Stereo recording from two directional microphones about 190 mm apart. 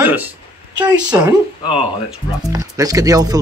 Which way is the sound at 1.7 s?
5° right (ahead or behind).